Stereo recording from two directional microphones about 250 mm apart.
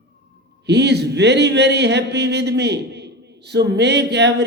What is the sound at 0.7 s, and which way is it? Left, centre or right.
Speech, right.